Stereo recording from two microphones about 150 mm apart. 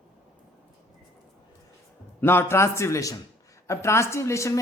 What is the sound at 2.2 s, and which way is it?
A man's voice, 15° left (ahead or behind).